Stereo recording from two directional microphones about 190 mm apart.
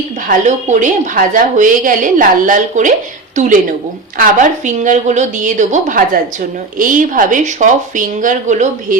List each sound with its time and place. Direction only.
0.3 s a woman's voice: 40° right (ahead or behind)